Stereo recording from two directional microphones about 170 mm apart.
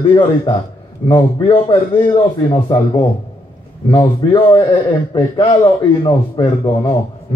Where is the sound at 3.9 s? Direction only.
30° left (ahead or behind).